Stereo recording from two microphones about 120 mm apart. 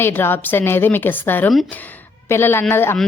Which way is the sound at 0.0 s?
20° left (ahead or behind).